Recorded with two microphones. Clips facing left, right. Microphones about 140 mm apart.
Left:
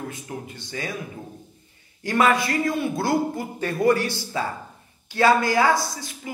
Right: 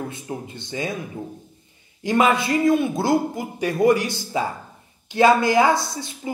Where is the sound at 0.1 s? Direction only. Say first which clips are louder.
Right 3 dB; 25° right (ahead or behind).